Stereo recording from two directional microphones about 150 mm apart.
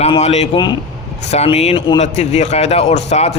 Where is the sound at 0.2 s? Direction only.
45° left (ahead or behind).